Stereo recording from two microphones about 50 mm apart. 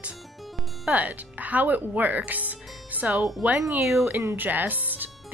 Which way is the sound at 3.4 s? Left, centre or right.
Centre.